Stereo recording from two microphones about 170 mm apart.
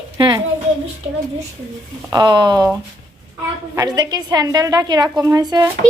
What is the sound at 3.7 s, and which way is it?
A woman's voice, 20° right (ahead or behind).